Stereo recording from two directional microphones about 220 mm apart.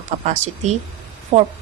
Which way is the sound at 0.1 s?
30° right (ahead or behind).